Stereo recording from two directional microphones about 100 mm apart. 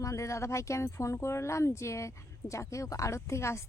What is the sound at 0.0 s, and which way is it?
A woman's voice, 30° left (ahead or behind).